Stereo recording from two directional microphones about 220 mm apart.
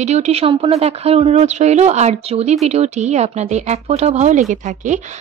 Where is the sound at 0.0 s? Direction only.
30° right (ahead or behind).